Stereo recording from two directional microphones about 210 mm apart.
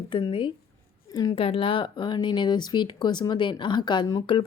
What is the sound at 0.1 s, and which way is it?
Speech, 25° left (ahead or behind).